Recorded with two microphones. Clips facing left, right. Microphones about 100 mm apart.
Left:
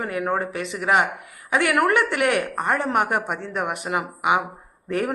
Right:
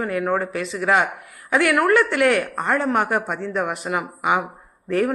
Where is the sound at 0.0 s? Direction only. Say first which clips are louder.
Right 2 dB; 20° left (ahead or behind).